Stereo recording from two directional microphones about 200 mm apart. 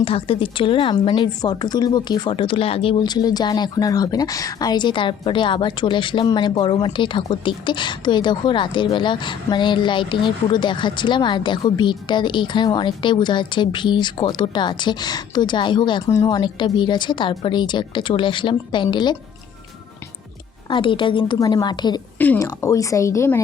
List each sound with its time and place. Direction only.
0.0 s a woman's voice: 30° left (ahead or behind)
20.7 s a woman's voice: 25° left (ahead or behind)
22.2 s a woman's voice: 10° left (ahead or behind)